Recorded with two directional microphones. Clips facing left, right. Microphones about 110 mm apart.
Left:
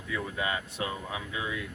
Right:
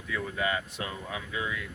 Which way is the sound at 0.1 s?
20° left (ahead or behind).